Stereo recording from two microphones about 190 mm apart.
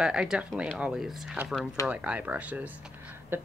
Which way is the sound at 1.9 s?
5° right (ahead or behind).